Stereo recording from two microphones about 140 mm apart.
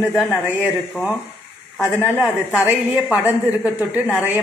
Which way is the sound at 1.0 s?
5° left (ahead or behind).